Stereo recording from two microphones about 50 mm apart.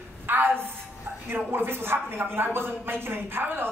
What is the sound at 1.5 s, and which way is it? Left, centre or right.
A woman's voice, right.